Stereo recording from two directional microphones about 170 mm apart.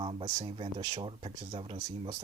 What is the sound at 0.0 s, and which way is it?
Speech, 35° right (ahead or behind).